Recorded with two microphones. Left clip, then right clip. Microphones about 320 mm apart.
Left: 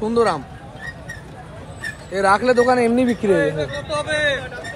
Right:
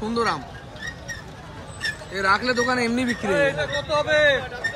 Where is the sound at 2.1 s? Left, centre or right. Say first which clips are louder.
Left 6 dB; centre.